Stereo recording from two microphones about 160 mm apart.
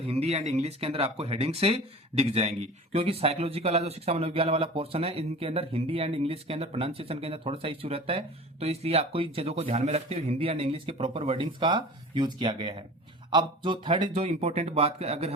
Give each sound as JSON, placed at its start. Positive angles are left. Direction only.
{"t": 0.1, "sound": "speech", "side_deg": -40}